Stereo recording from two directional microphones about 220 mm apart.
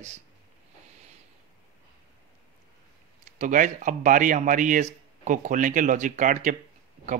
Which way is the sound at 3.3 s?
35° right (ahead or behind).